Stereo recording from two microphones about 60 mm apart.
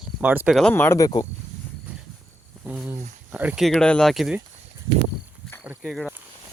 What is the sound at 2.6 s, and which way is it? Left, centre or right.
Speech, right.